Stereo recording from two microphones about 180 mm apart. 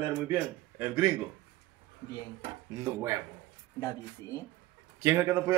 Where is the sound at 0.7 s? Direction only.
10° right (ahead or behind).